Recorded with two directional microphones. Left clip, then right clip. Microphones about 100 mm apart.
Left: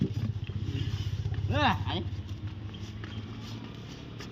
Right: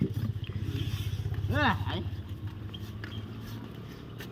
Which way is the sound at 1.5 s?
25° left (ahead or behind).